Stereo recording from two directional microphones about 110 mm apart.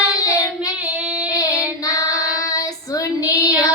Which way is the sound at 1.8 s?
30° left (ahead or behind).